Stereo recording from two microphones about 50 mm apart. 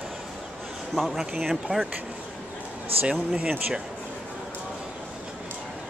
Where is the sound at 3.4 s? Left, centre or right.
Centre.